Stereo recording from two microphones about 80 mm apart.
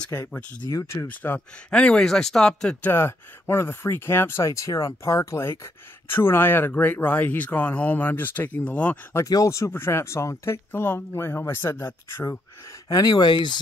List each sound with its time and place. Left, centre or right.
0.3 s speech: centre
0.7 s speech: left
1.0 s speech: left
1.7 s speech: centre
2.8 s speech: left
9.1 s speech: left
9.7 s speech: left
12.8 s speech: left